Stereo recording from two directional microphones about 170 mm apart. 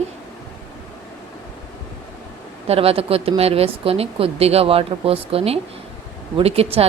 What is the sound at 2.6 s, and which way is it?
A woman's voice, 35° right (ahead or behind).